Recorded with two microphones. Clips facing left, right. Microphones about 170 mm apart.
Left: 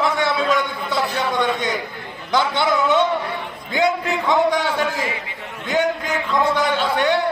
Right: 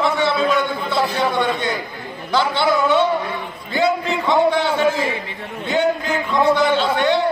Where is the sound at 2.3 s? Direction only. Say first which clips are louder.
Right 1 dB; 15° left (ahead or behind).